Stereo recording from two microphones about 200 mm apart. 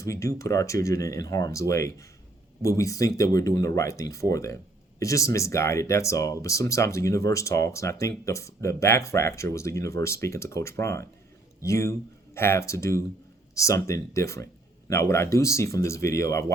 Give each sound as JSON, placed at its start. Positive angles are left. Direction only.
{"t": 0.0, "sound": "speech", "side_deg": 15}